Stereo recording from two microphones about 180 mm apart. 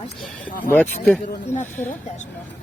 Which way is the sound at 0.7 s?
10° left (ahead or behind).